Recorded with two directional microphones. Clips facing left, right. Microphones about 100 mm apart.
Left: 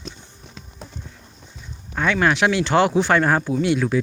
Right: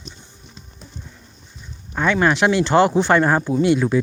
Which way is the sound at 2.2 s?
Centre (ahead or behind).